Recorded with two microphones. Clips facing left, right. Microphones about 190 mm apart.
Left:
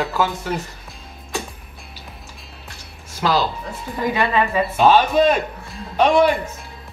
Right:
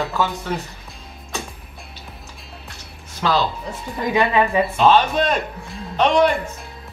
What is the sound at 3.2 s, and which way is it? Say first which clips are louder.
Speech: left 1 dB; 5° left (ahead or behind).